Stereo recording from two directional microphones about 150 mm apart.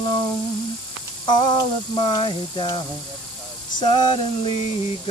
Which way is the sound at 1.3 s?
30° left (ahead or behind).